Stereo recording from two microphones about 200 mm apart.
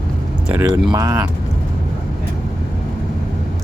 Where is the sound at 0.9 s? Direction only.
20° right (ahead or behind).